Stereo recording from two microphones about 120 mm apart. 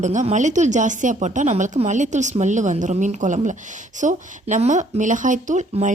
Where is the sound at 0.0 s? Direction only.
85° right.